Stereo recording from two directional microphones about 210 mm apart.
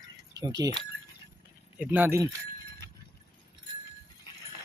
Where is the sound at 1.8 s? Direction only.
10° right (ahead or behind).